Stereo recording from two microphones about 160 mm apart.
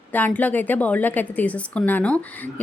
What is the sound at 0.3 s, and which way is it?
A woman's voice, 10° left (ahead or behind).